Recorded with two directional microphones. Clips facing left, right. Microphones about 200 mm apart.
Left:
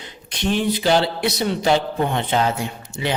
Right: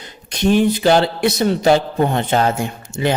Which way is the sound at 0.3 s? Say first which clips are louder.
Right 6 dB; 45° right (ahead or behind).